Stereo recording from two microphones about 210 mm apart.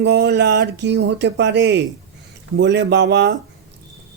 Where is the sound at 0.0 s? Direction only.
55° right (ahead or behind).